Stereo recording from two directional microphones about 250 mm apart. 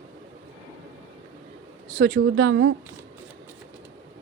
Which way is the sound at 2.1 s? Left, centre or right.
Right.